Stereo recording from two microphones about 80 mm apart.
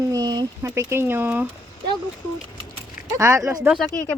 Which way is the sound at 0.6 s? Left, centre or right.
Right.